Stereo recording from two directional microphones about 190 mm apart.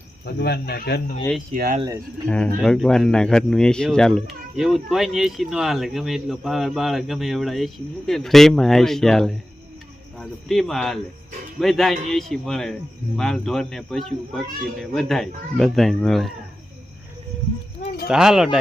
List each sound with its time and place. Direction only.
0.3 s speech: 60° left (ahead or behind)
1.5 s speech: 50° right (ahead or behind)
2.2 s speech: 5° left (ahead or behind)
18.1 s speech: 5° right (ahead or behind)